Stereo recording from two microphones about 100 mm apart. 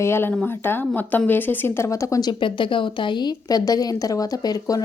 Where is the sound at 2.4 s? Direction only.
55° left (ahead or behind).